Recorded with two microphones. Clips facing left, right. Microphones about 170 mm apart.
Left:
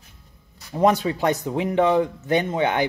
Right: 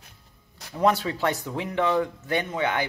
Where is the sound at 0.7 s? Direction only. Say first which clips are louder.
Left 4 dB; 15° left (ahead or behind).